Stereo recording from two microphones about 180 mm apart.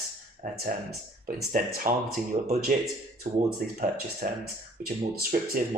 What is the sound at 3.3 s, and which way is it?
Speech, 50° right (ahead or behind).